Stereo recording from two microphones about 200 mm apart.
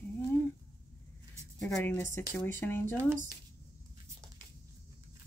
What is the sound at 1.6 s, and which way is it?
Speech, 10° left (ahead or behind).